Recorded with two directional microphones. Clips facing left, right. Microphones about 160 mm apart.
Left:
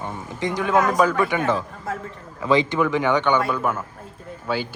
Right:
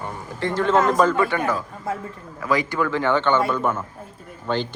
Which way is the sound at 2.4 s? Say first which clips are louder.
Left 3 dB; 25° left (ahead or behind).